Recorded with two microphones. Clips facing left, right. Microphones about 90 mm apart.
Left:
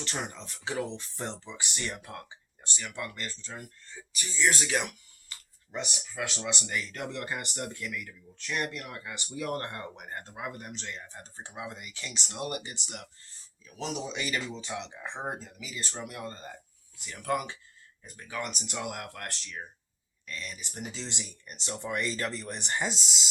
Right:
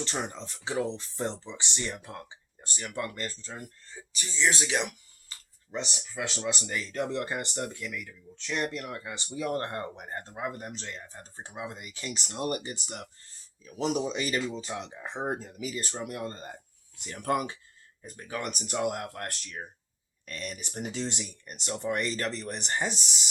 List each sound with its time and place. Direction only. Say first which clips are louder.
0.0 s speech: right 3 dB; 30° right (ahead or behind)
2.6 s speech: right 3 dB; 45° right (ahead or behind)
4.1 s speech: even; 25° right (ahead or behind); by 22.9 s 40° right (ahead or behind)